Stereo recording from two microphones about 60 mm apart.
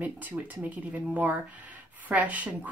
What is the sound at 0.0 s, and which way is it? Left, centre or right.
Speech, right.